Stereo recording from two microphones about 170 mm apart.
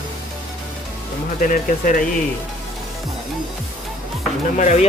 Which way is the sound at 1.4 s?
50° left (ahead or behind).